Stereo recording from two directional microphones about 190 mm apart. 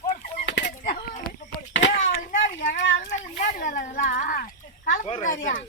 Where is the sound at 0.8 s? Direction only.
45° left (ahead or behind).